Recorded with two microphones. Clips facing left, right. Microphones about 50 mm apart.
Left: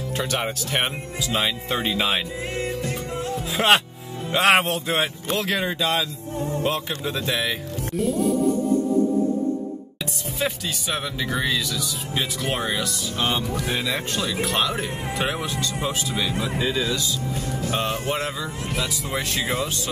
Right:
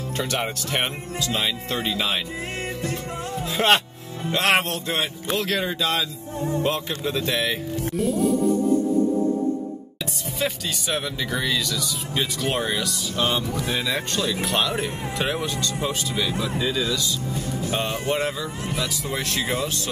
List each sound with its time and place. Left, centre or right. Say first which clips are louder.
0.2 s speech: even; centre
3.4 s speech: even; centre
7.9 s music: even; centre
10.4 s speech: even; centre
16.3 s speech: even; left
17.6 s speech: even; centre